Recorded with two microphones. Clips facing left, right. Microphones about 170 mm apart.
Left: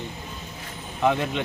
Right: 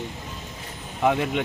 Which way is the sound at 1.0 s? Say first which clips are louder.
Right 1 dB; 10° right (ahead or behind).